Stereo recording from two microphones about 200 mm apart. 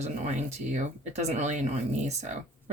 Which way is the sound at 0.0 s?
35° right (ahead or behind).